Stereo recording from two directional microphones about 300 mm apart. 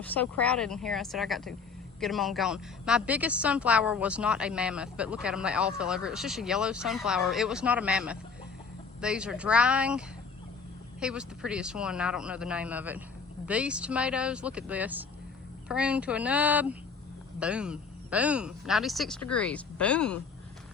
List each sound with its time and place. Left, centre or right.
0.0 s a woman's voice: centre
11.0 s a woman's voice: centre